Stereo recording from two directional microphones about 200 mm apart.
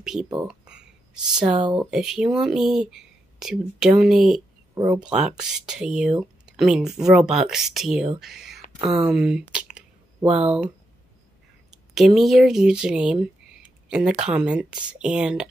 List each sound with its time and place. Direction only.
0.0 s speech: centre (ahead or behind)
1.3 s speech: 20° right (ahead or behind)
1.8 s speech: 5° right (ahead or behind)
8.2 s whispering: centre (ahead or behind)
9.0 s speech: 5° right (ahead or behind)
10.2 s speech: 30° right (ahead or behind)
11.7 s speech: centre (ahead or behind)